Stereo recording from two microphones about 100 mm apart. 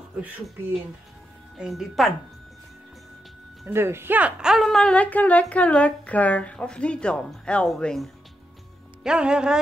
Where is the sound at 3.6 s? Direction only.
25° right (ahead or behind); by 4.7 s 5° right (ahead or behind).